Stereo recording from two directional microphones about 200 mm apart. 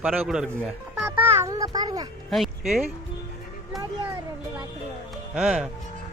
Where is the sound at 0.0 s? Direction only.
Centre (ahead or behind); by 2.0 s 20° right (ahead or behind).